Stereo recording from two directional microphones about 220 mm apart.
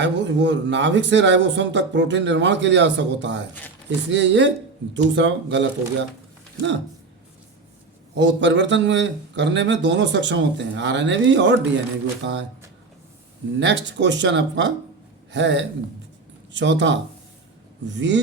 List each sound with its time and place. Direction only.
0.0 s speech: 55° right (ahead or behind)
8.1 s speech: 55° right (ahead or behind)
13.6 s speech: 55° right (ahead or behind)